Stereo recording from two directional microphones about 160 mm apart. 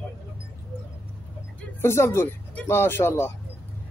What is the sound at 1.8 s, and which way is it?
Speech, 15° left (ahead or behind).